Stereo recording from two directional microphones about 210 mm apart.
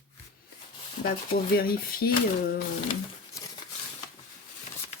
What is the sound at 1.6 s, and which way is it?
Speech, 45° left (ahead or behind).